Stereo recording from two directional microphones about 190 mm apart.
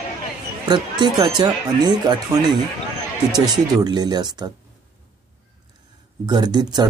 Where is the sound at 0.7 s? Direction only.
25° right (ahead or behind).